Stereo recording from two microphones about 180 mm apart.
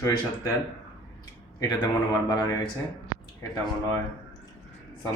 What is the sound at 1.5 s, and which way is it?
Speech, 20° left (ahead or behind).